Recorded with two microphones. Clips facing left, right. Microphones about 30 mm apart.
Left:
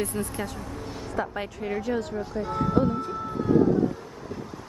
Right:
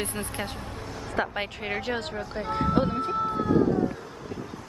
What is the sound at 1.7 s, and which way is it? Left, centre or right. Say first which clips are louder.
Speech: left 4 dB; right.